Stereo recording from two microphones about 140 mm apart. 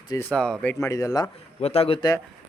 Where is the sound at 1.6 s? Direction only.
45° left (ahead or behind).